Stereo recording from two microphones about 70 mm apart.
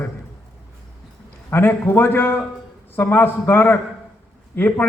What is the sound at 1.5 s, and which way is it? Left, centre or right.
A man's voice, left.